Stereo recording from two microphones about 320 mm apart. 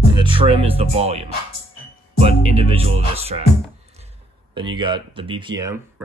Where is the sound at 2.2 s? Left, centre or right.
Centre.